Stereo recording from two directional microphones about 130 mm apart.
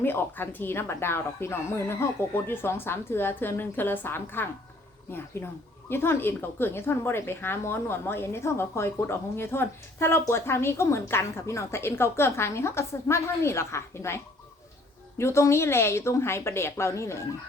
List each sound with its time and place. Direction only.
0.0 s a woman's voice: 15° left (ahead or behind)
15.2 s a woman's voice: 20° left (ahead or behind)